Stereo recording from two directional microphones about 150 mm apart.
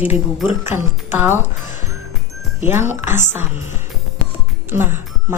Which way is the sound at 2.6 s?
15° right (ahead or behind).